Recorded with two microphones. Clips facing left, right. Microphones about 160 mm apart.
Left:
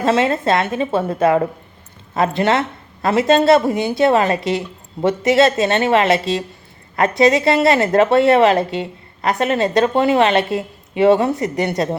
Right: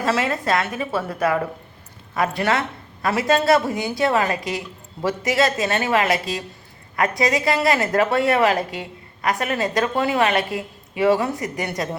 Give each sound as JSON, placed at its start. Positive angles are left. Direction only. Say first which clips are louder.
{"t": 0.0, "sound": "a woman's voice", "louder": "left 6 dB", "side_deg": 25}